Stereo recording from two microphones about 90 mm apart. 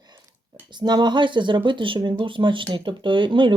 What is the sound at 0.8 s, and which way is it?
Speech, 55° right (ahead or behind).